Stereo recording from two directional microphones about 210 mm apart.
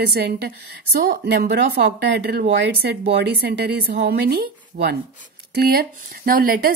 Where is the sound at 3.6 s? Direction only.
50° right (ahead or behind).